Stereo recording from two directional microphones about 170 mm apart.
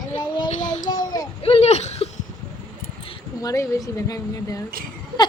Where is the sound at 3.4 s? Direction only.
20° left (ahead or behind).